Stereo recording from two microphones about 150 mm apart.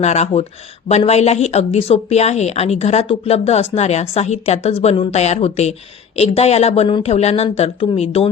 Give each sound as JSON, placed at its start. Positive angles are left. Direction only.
{"t": 0.0, "sound": "speech", "side_deg": 50}